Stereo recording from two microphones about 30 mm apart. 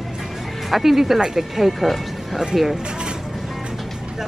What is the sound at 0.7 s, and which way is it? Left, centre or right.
Speech, centre.